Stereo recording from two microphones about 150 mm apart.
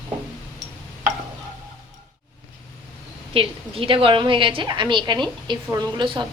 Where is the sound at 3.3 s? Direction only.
35° right (ahead or behind).